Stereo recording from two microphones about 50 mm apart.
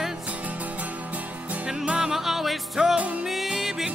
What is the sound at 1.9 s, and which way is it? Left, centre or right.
Music, centre.